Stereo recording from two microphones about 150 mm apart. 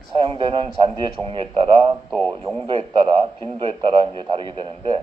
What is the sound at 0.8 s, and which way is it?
Speech, 35° right (ahead or behind).